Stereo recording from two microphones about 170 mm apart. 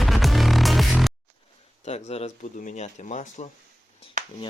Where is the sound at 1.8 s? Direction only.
40° left (ahead or behind).